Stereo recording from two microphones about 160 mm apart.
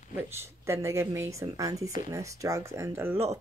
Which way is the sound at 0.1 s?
15° right (ahead or behind).